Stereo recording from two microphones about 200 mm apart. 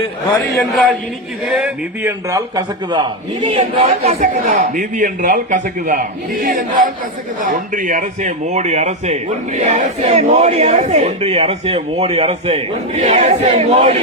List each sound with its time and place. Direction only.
0.5 s a man's voice: centre (ahead or behind); by 3.0 s 15° right (ahead or behind)
3.4 s a man's voice: 35° right (ahead or behind)